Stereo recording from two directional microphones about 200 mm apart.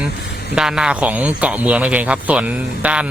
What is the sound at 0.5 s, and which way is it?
Speech, 5° right (ahead or behind).